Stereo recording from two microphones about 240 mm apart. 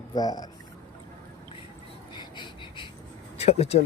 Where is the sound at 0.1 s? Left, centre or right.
Centre.